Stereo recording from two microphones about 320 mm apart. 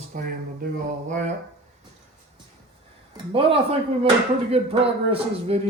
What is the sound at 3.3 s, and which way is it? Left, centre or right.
Speech, centre.